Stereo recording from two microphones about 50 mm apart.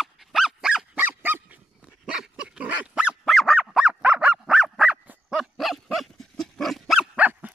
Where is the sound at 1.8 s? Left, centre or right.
Centre.